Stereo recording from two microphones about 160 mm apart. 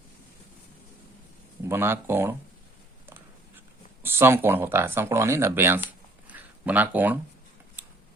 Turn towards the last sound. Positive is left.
turn(degrees=-10)  # may be behind; listen again after turning